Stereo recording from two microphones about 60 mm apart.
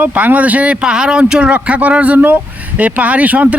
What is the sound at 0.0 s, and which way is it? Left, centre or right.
A man's voice, right.